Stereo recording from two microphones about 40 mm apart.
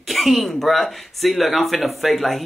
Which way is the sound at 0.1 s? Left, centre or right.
Centre.